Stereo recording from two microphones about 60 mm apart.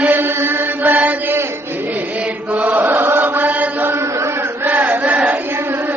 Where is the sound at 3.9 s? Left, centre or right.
Right.